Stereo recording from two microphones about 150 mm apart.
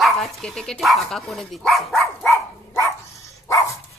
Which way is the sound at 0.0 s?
5° left (ahead or behind).